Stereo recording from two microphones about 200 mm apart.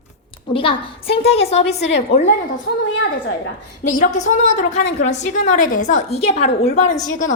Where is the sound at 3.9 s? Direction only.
40° left (ahead or behind).